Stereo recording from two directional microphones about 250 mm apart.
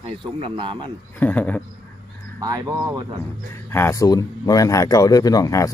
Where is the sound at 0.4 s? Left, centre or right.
Centre.